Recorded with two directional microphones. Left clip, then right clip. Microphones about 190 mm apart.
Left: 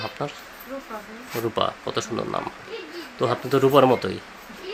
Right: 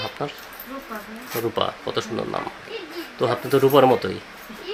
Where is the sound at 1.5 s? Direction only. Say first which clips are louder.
Left 1 dB; 15° left (ahead or behind).